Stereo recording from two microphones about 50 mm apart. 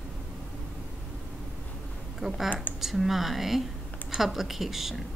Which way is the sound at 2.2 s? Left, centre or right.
Centre.